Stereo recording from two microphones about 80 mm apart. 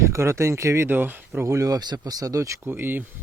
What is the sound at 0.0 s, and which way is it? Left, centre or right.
Speech, right.